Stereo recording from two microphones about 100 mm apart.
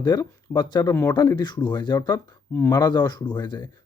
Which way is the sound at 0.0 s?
45° left (ahead or behind).